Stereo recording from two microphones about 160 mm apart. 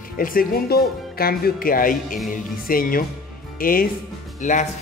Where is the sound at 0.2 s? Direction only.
65° left (ahead or behind).